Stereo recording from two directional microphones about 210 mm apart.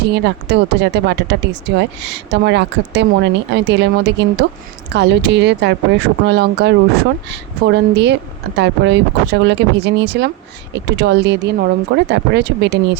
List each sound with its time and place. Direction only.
0.0 s speech: 55° right (ahead or behind)